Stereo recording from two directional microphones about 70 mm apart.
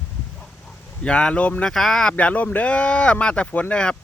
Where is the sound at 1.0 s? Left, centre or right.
Centre.